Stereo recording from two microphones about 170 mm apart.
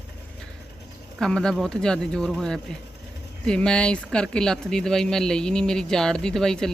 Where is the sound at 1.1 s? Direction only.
5° left (ahead or behind).